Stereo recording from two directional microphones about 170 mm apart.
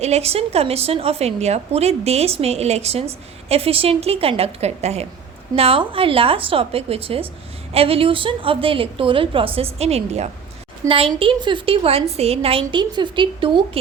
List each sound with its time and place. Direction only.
0.0 s a woman's voice: 40° right (ahead or behind)